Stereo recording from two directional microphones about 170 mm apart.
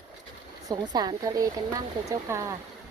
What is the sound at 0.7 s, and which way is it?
Speech, 25° right (ahead or behind).